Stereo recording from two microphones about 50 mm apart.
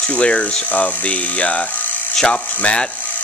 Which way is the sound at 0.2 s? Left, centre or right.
Left.